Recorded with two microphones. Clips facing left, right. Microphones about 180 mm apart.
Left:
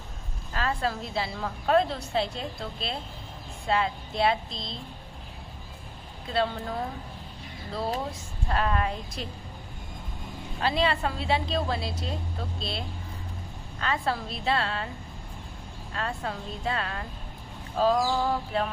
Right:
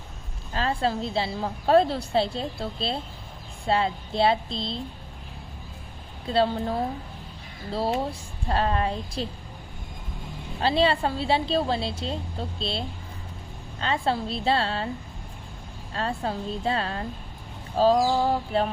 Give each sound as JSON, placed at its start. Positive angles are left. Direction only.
{"t": 0.5, "sound": "a woman's voice", "side_deg": -30}
{"t": 6.3, "sound": "a woman's voice", "side_deg": -30}
{"t": 8.4, "sound": "a woman's voice", "side_deg": -30}
{"t": 10.6, "sound": "a woman's voice", "side_deg": -30}
{"t": 15.9, "sound": "a woman's voice", "side_deg": -30}